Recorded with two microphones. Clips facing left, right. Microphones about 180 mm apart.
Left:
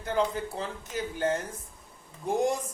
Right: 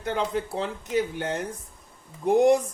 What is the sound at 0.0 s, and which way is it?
Speech, 70° right (ahead or behind).